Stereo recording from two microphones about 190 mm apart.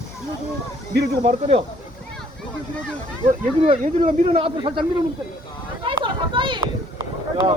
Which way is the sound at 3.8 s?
40° right (ahead or behind).